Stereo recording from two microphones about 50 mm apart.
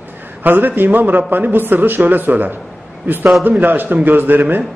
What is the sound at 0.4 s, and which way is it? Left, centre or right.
A man's voice, right.